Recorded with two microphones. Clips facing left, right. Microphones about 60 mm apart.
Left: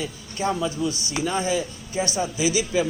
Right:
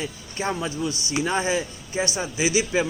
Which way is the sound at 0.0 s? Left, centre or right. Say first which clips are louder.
Left 2 dB; right.